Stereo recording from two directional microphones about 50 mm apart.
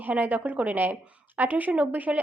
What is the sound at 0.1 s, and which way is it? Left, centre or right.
Speech, right.